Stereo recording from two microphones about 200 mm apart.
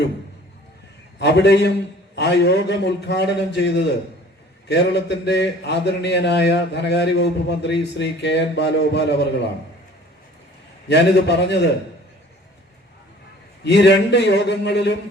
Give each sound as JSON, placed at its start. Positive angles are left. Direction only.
{"t": 1.2, "sound": "a man's voice", "side_deg": 55}
{"t": 10.8, "sound": "a man's voice", "side_deg": 60}
{"t": 13.7, "sound": "a man's voice", "side_deg": 60}